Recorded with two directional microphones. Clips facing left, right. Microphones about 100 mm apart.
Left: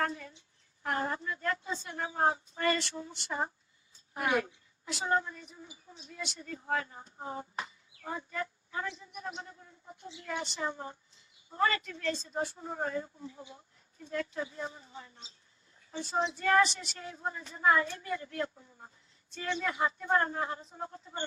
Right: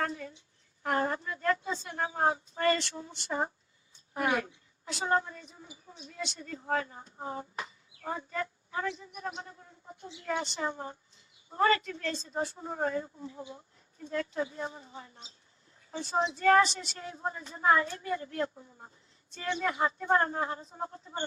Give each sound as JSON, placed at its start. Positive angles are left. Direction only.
{"t": 0.1, "sound": "a woman's voice", "side_deg": -30}
{"t": 7.6, "sound": "a sound", "side_deg": -30}
{"t": 9.3, "sound": "a woman's voice", "side_deg": -30}